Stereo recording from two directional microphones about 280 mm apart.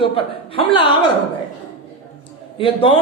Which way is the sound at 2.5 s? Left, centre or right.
Centre.